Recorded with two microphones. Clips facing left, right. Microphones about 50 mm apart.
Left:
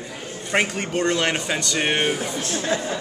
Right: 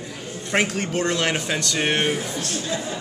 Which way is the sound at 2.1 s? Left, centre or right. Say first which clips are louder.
Left 1 dB; left.